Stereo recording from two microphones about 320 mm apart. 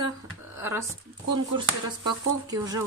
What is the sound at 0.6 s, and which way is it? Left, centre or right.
Speech, centre.